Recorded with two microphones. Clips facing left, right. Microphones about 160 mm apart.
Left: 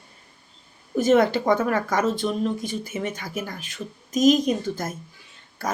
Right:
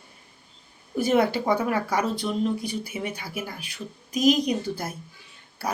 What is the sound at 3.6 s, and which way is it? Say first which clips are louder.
Speech: left 2 dB; 45° left (ahead or behind).